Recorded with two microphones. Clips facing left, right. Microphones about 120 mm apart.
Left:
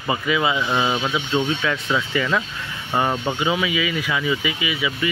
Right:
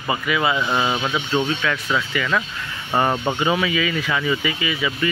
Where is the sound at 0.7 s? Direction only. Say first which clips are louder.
Even; centre (ahead or behind).